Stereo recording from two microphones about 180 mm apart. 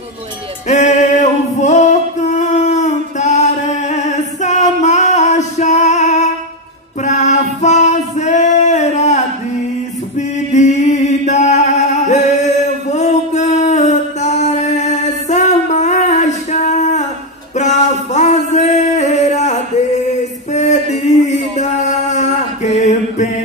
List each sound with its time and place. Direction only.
0.7 s music: 40° left (ahead or behind)
7.0 s female singing: 40° left (ahead or behind)
10.1 s mantra: 40° left (ahead or behind)
12.9 s music: 40° left (ahead or behind)
20.5 s a sound: 40° left (ahead or behind)